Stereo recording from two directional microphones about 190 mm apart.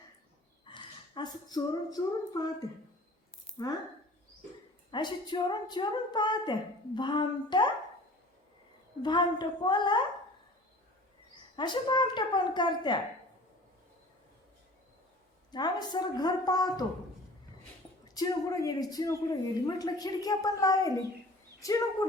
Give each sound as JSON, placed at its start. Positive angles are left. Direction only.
{"t": 0.6, "sound": "a woman's voice", "side_deg": 25}
{"t": 4.9, "sound": "a woman's voice", "side_deg": 25}
{"t": 9.0, "sound": "a woman's voice", "side_deg": 25}
{"t": 11.5, "sound": "a woman's voice", "side_deg": 25}
{"t": 15.5, "sound": "a woman's voice", "side_deg": 20}
{"t": 18.1, "sound": "a woman's voice", "side_deg": 20}